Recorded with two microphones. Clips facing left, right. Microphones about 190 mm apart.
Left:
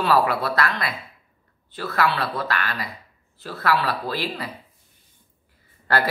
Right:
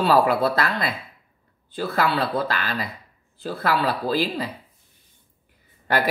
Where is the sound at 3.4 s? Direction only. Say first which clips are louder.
Right 1 dB; 30° right (ahead or behind).